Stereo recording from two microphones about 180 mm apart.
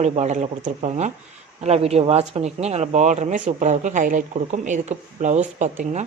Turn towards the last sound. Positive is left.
turn(degrees=-40)  # may be behind; listen again after turning